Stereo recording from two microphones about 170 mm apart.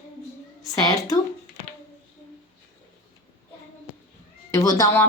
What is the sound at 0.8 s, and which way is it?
Speech, 20° left (ahead or behind).